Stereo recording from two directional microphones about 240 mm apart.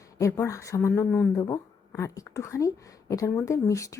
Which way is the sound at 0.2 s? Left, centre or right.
Centre.